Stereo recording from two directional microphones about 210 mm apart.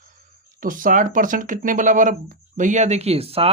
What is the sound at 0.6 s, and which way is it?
Speech, 40° right (ahead or behind).